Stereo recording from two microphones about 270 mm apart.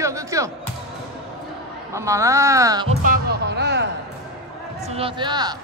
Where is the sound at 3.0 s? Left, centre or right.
Right.